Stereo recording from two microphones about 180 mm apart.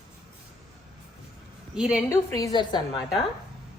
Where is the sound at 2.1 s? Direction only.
20° left (ahead or behind).